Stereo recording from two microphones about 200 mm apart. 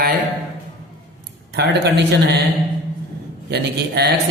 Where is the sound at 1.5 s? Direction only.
55° right (ahead or behind).